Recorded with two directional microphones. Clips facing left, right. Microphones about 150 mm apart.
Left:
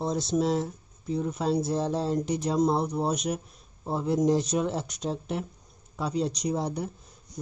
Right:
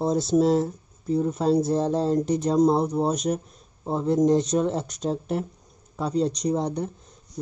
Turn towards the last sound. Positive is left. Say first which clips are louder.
# right 4 dB
turn(degrees=5)  # may be behind; listen again after turning